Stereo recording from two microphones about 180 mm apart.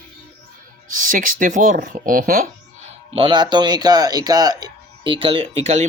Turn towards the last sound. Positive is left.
turn(degrees=-35)  # may be behind; listen again after turning